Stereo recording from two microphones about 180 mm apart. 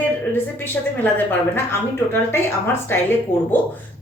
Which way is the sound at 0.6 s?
10° left (ahead or behind).